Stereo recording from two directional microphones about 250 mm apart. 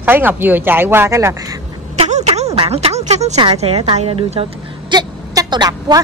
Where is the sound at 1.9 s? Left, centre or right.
Right.